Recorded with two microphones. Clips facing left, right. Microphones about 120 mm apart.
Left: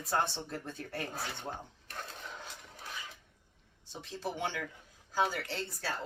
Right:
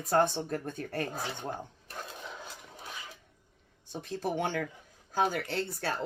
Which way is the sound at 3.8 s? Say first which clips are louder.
Right 5 dB; 50° right (ahead or behind).